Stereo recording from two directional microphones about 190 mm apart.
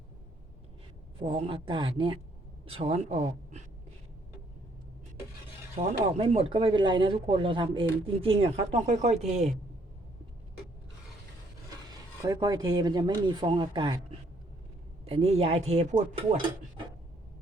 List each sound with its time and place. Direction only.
1.2 s speech: 25° right (ahead or behind)
5.7 s speech: 30° right (ahead or behind)
11.9 s speech: 20° right (ahead or behind)
15.0 s speech: 30° right (ahead or behind)